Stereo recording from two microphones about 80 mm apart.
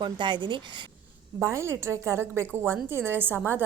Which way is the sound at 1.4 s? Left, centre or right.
Right.